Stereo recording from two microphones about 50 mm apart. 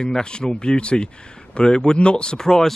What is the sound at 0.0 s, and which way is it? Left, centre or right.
Speech, centre.